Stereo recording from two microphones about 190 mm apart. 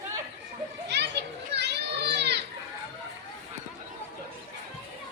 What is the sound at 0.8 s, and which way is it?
Children playing, 60° right (ahead or behind).